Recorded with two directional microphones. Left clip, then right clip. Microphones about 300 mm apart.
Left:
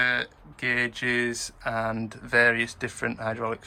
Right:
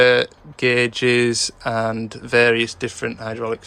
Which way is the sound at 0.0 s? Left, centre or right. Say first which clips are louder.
Right 11 dB; centre.